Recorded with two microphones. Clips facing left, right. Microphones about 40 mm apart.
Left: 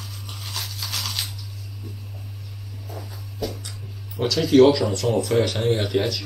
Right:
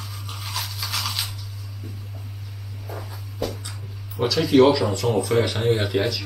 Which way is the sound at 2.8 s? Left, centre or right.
Right.